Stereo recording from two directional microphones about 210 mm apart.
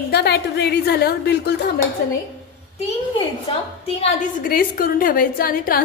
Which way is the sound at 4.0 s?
40° left (ahead or behind).